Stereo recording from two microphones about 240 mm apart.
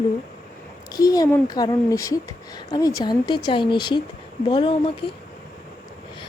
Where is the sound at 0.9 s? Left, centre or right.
Centre.